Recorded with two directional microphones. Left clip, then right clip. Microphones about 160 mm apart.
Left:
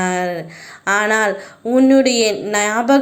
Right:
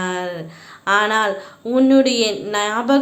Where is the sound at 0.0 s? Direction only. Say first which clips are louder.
Left 4 dB; 25° left (ahead or behind).